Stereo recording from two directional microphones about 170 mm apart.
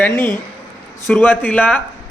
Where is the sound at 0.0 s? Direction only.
10° left (ahead or behind).